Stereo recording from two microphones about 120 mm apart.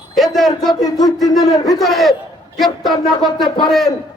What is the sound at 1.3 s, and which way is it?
Speech, 30° left (ahead or behind).